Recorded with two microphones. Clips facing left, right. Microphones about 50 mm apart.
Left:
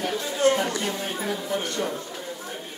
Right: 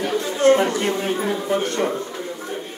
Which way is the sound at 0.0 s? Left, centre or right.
Right.